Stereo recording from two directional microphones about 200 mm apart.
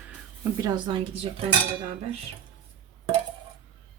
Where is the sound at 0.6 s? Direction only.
20° right (ahead or behind).